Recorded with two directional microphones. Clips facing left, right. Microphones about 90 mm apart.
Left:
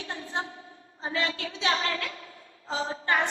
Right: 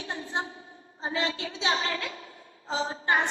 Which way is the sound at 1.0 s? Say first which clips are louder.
Even; 25° right (ahead or behind).